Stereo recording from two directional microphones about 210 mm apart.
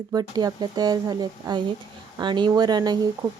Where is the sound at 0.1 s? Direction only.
20° right (ahead or behind).